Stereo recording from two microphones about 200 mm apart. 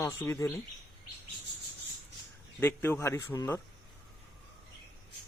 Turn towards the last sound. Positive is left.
turn(degrees=15)  # may be behind; listen again after turning